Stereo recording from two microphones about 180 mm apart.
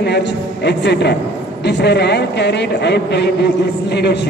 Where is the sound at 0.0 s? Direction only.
70° left (ahead or behind).